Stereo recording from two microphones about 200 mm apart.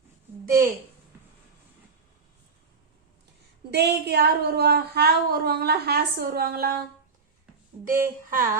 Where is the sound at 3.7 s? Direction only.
55° right (ahead or behind).